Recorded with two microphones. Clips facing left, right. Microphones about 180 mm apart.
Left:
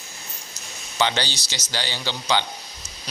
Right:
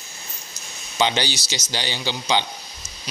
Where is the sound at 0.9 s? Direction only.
15° right (ahead or behind).